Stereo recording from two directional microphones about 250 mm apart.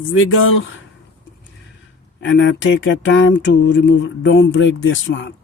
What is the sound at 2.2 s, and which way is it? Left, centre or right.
Speech, left.